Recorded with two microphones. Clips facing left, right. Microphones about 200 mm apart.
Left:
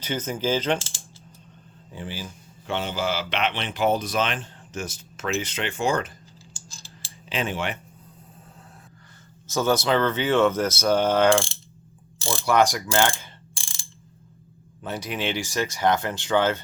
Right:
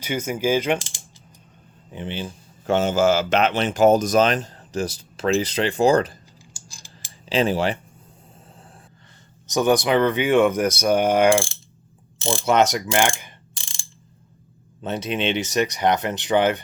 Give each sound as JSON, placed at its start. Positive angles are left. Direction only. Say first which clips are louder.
{"t": 0.0, "sound": "speech", "louder": "right 3 dB", "side_deg": -10}
{"t": 2.6, "sound": "speech", "louder": "right 9 dB", "side_deg": -45}
{"t": 6.7, "sound": "a sound", "louder": "even", "side_deg": -10}
{"t": 7.3, "sound": "speech", "louder": "right 7 dB", "side_deg": -35}
{"t": 9.5, "sound": "speech", "louder": "right 3 dB", "side_deg": -15}
{"t": 12.2, "sound": "mechanisms", "louder": "right 2 dB", "side_deg": -20}
{"t": 14.8, "sound": "speech", "louder": "right 5 dB", "side_deg": -25}